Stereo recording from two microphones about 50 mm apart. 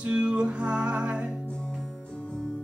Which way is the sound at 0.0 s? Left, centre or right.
Right.